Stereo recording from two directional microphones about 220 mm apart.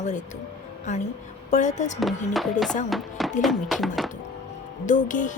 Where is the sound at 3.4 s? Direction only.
Centre (ahead or behind).